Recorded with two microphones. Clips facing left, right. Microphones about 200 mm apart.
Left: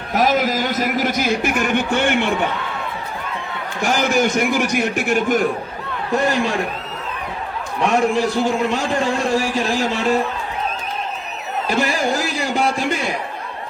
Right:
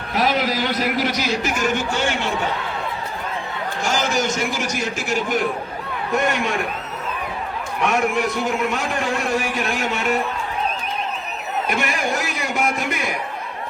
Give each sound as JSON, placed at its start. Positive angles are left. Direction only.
{"t": 0.1, "sound": "a man's voice", "side_deg": 45}
{"t": 3.8, "sound": "a man's voice", "side_deg": 60}
{"t": 6.1, "sound": "a man's voice", "side_deg": 35}
{"t": 7.8, "sound": "a man's voice", "side_deg": 30}
{"t": 11.7, "sound": "a sound", "side_deg": 30}